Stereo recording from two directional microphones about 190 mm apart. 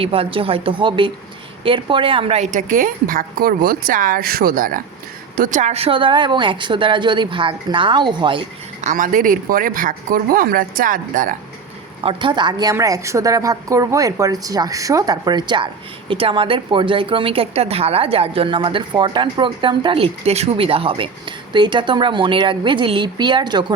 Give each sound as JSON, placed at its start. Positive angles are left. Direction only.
{"t": 0.0, "sound": "a woman's voice", "side_deg": -30}
{"t": 8.8, "sound": "a woman's voice", "side_deg": -45}
{"t": 12.0, "sound": "a woman's voice", "side_deg": -25}